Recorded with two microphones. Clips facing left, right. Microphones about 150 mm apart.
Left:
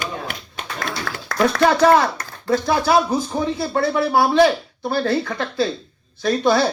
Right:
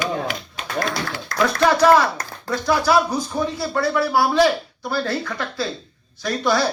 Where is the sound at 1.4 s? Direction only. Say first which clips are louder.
Left 1 dB; 25° left (ahead or behind).